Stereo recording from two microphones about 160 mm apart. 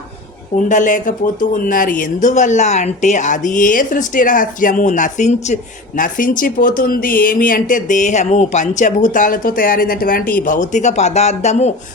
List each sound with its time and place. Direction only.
0.5 s speech: 55° left (ahead or behind)